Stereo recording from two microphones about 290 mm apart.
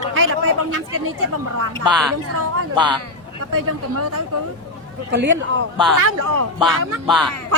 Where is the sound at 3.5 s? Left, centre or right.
Right.